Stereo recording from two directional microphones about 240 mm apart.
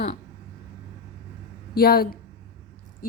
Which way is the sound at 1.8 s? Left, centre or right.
Left.